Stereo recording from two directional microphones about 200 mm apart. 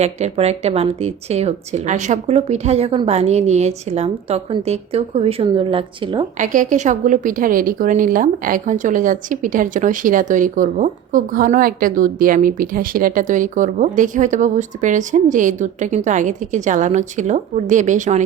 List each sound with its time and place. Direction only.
0.0 s a woman's voice: 35° right (ahead or behind)
6.4 s a woman's voice: 40° right (ahead or behind)